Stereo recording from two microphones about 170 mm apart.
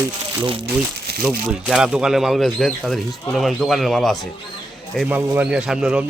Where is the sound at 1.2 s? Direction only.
5° right (ahead or behind).